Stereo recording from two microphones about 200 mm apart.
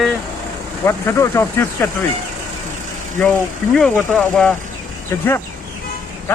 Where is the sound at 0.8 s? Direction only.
15° left (ahead or behind).